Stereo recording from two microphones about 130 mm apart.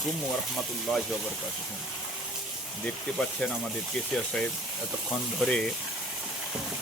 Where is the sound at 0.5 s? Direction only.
Centre (ahead or behind).